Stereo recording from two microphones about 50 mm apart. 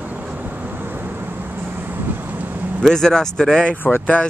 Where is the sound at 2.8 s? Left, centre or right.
Centre.